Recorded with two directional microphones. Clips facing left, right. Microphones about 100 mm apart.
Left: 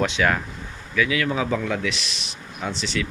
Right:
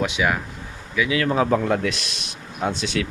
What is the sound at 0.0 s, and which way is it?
Speech, 10° right (ahead or behind).